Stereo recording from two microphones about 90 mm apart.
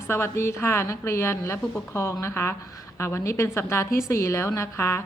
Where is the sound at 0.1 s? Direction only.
30° left (ahead or behind).